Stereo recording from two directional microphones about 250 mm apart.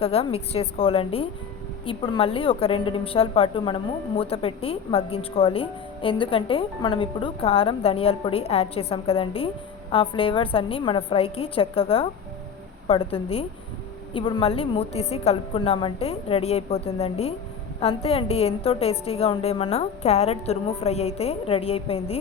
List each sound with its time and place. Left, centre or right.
0.0 s a woman's voice: left